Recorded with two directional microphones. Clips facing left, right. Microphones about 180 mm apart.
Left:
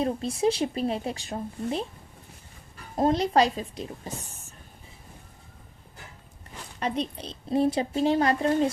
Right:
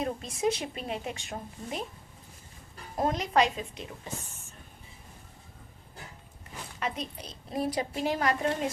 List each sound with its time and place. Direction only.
0.0 s speech: 30° left (ahead or behind)
2.9 s speech: 30° left (ahead or behind)
6.7 s a woman's voice: 35° left (ahead or behind)